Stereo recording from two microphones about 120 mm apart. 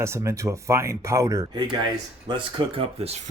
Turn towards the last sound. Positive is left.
turn(degrees=-55)  # may be behind; listen again after turning